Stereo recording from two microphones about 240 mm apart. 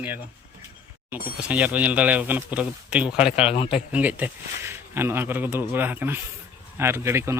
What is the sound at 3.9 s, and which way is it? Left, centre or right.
Speech, centre.